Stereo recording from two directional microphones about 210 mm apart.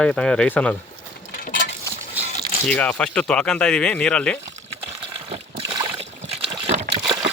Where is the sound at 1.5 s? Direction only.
45° left (ahead or behind).